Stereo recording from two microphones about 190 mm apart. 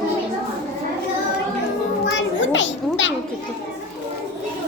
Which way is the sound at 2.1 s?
75° left (ahead or behind).